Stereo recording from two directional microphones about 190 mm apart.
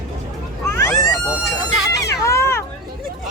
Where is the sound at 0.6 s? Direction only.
15° left (ahead or behind).